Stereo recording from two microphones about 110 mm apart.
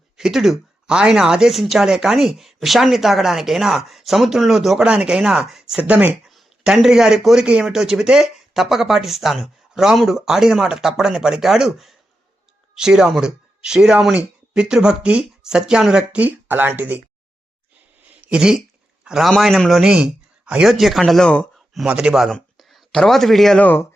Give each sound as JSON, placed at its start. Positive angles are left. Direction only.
{"t": 0.2, "sound": "speech", "side_deg": -5}
{"t": 18.1, "sound": "a sound", "side_deg": -10}
{"t": 19.0, "sound": "a man's voice", "side_deg": -5}
{"t": 21.8, "sound": "speech", "side_deg": -10}
{"t": 23.6, "sound": "speech", "side_deg": 15}